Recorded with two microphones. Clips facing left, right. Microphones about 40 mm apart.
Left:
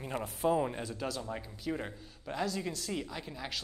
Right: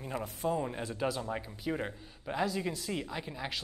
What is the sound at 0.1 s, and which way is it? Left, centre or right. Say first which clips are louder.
Speech: even; left.